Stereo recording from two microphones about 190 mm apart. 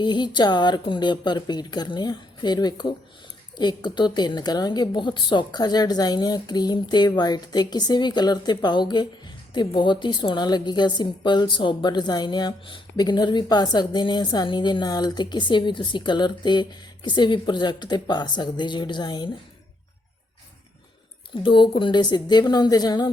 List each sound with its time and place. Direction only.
0.0 s a woman's voice: 25° left (ahead or behind)
21.4 s a woman's voice: 25° left (ahead or behind)